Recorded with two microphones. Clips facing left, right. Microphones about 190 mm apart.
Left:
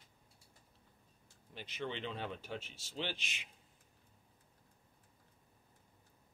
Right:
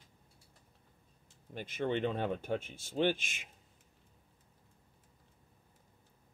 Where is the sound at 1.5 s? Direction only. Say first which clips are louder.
Right 8 dB; 50° right (ahead or behind).